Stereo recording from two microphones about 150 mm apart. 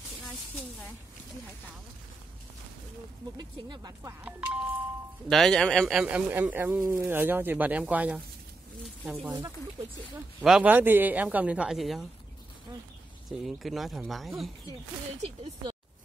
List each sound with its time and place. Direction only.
3.3 s speech: 30° right (ahead or behind)
4.2 s speech: 10° right (ahead or behind)
5.3 s a man's voice: 5° left (ahead or behind)
10.4 s speech: 5° right (ahead or behind)
13.3 s a man's voice: centre (ahead or behind)